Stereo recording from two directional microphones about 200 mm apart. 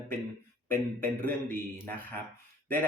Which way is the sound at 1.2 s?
10° left (ahead or behind).